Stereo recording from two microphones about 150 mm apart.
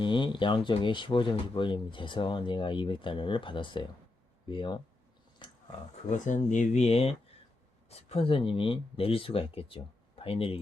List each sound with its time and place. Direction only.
0.0 s speech: 30° left (ahead or behind)
5.4 s a sound: 30° left (ahead or behind)
6.1 s speech: 55° left (ahead or behind); by 10.6 s 40° left (ahead or behind)